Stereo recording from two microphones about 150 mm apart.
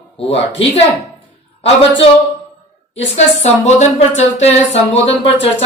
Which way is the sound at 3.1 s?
50° left (ahead or behind).